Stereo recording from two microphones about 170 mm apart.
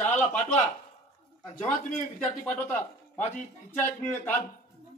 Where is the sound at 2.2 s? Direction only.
10° left (ahead or behind).